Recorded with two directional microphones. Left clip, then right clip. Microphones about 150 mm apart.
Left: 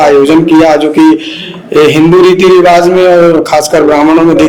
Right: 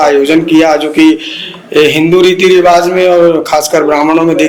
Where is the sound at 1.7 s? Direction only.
15° left (ahead or behind).